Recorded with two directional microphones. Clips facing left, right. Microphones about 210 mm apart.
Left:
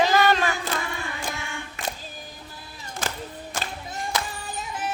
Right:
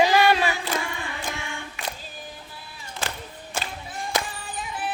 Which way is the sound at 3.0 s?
40° left (ahead or behind).